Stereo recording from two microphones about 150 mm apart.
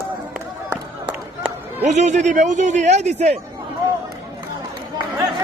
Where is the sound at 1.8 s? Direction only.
50° right (ahead or behind).